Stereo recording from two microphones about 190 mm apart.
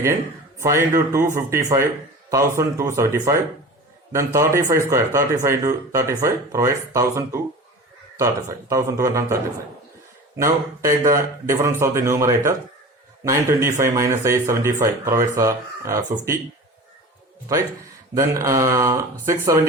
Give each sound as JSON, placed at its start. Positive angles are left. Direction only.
{"t": 0.6, "sound": "speech", "side_deg": -15}
{"t": 8.7, "sound": "speech", "side_deg": -15}
{"t": 10.3, "sound": "speech", "side_deg": -15}
{"t": 18.1, "sound": "speech", "side_deg": -15}